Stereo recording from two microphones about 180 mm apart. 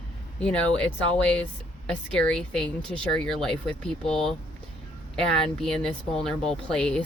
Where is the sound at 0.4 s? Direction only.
5° left (ahead or behind).